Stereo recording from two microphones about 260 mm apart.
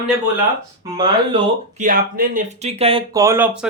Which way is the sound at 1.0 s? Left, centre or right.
Centre.